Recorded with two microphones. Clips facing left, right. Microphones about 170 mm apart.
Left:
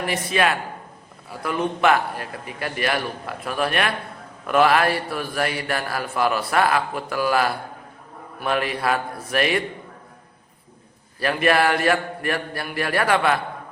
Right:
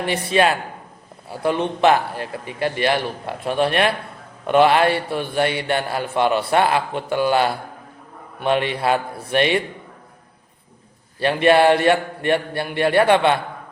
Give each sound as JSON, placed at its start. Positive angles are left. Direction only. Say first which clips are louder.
{"t": 0.0, "sound": "a man's voice", "louder": "right 4 dB", "side_deg": -30}
{"t": 11.2, "sound": "a man's voice", "louder": "right 5 dB", "side_deg": -30}